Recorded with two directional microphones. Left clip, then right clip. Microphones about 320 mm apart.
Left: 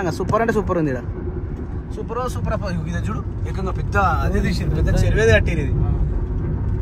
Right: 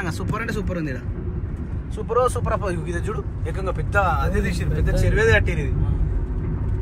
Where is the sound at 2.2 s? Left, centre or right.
Centre.